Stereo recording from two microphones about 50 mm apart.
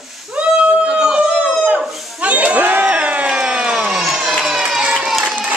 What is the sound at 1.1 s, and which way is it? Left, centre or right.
Chicken, right.